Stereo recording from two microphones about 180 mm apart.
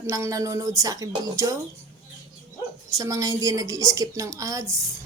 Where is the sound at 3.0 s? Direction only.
20° right (ahead or behind).